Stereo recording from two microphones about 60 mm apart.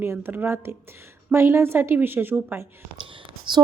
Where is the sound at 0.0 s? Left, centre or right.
Right.